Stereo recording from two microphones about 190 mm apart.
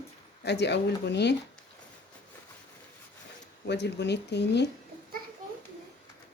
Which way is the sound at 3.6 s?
65° left (ahead or behind).